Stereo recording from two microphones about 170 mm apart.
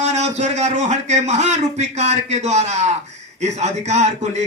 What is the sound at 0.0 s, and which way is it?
A man's voice, 40° right (ahead or behind).